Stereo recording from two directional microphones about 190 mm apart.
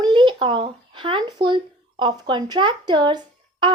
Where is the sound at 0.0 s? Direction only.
25° right (ahead or behind).